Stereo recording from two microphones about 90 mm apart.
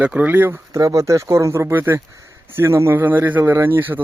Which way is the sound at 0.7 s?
35° right (ahead or behind).